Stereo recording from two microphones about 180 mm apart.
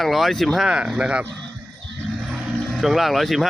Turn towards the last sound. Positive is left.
turn(degrees=0)  # may be behind; listen again after turning